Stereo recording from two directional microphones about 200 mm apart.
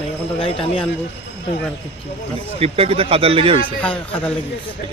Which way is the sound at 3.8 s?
5° left (ahead or behind).